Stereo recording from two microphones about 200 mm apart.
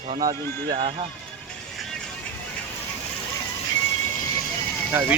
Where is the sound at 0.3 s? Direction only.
25° right (ahead or behind).